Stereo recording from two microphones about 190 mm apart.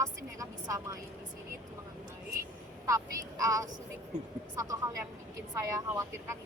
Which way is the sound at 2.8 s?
15° right (ahead or behind).